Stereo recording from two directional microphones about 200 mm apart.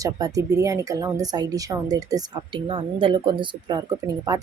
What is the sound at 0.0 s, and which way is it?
Speech, 15° right (ahead or behind).